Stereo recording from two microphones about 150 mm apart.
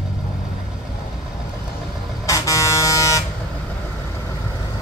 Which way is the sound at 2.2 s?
20° left (ahead or behind).